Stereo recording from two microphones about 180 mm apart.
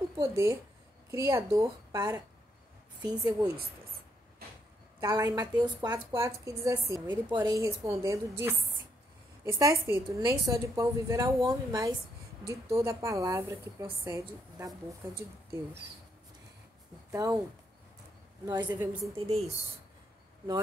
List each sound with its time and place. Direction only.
0.2 s a woman's voice: 15° right (ahead or behind)
5.0 s a woman's voice: 20° right (ahead or behind)
17.1 s a woman's voice: 20° right (ahead or behind)
18.4 s a woman's voice: 25° right (ahead or behind)
18.7 s a woman's voice: 10° right (ahead or behind)
19.1 s speech: 35° right (ahead or behind)